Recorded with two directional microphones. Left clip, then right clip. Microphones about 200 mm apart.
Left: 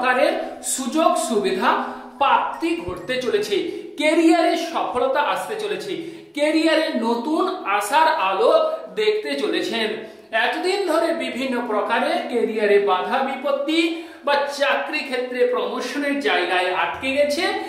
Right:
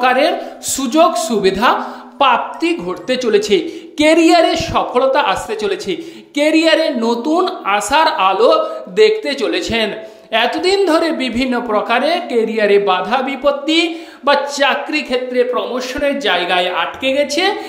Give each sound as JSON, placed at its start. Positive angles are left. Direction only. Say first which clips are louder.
{"t": 0.0, "sound": "a woman's voice", "louder": "right 5 dB", "side_deg": -45}